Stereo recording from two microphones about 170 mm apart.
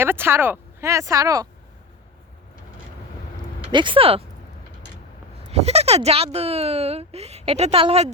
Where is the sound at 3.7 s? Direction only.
30° right (ahead or behind).